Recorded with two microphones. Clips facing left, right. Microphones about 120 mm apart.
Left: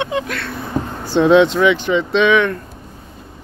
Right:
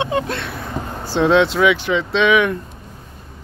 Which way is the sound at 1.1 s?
Centre (ahead or behind).